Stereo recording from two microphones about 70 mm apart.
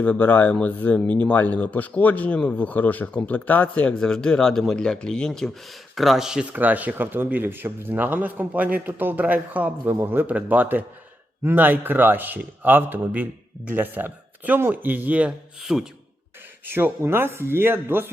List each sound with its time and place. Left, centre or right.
0.0 s a man's voice: left
4.0 s speech: centre
5.9 s speech: centre
6.4 s speech: right
9.9 s speech: right; by 15.4 s centre
15.6 s speech: centre
16.6 s speech: right